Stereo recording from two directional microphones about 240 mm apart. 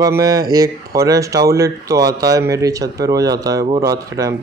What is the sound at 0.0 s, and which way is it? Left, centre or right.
Speech, centre.